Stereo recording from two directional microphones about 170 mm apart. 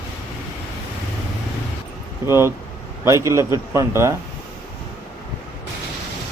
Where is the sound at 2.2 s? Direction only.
15° right (ahead or behind).